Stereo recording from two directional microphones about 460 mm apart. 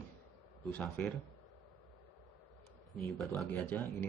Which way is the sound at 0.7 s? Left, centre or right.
Centre.